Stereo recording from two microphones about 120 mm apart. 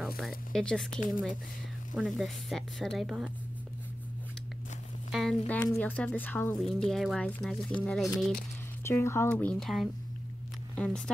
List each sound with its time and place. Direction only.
0.0 s speech: centre (ahead or behind)
5.1 s speech: centre (ahead or behind)
5.5 s a woman's voice: 15° left (ahead or behind)
6.6 s a woman's voice: centre (ahead or behind)
8.8 s speech: 20° left (ahead or behind)
9.3 s speech: 10° left (ahead or behind)